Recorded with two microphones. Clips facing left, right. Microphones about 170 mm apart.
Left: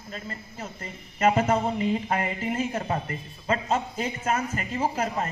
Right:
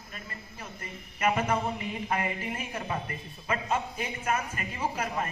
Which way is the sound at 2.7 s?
35° left (ahead or behind).